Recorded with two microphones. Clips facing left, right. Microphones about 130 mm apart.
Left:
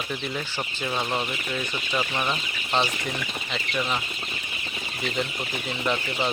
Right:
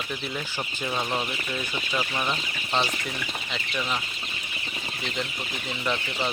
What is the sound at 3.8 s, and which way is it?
Speech, 10° left (ahead or behind).